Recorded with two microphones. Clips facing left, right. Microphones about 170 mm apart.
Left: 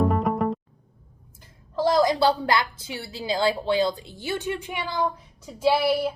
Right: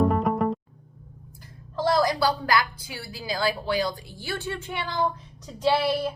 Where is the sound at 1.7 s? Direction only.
20° left (ahead or behind).